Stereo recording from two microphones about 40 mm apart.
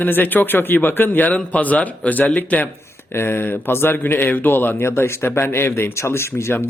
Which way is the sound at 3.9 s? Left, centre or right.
Left.